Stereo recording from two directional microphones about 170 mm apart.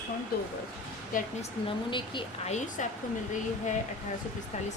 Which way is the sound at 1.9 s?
30° left (ahead or behind).